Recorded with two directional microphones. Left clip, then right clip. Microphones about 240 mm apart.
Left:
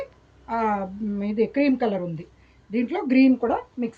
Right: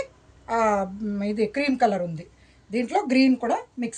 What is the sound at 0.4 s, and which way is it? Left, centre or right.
A woman's voice, right.